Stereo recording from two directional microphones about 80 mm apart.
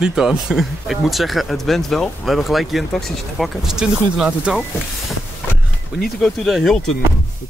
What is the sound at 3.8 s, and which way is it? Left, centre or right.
Speech, centre.